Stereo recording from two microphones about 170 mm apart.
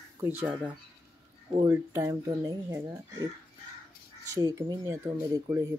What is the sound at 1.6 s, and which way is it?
Speech, 20° right (ahead or behind).